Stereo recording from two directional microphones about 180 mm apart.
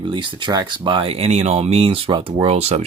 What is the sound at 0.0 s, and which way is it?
Speech, 25° right (ahead or behind).